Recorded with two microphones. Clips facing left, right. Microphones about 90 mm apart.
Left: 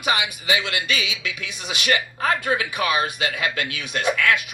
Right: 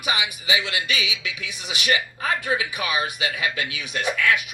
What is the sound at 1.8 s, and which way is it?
Speech, 45° left (ahead or behind).